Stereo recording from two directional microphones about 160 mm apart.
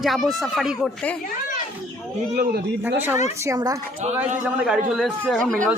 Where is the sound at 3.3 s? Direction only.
20° right (ahead or behind).